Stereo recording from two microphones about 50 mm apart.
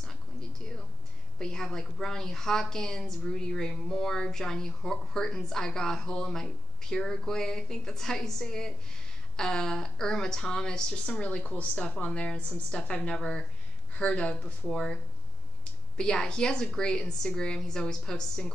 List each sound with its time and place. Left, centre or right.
1.4 s a woman's voice: centre
11.1 s a woman's voice: left
16.0 s a woman's voice: centre